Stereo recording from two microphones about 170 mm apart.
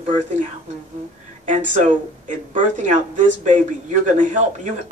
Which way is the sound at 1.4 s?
45° right (ahead or behind).